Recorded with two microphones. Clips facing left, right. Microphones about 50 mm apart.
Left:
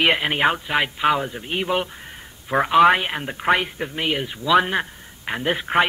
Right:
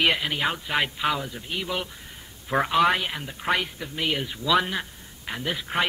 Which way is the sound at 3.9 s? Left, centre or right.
Left.